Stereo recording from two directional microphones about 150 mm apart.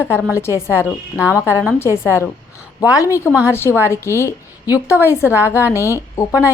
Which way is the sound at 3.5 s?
15° left (ahead or behind).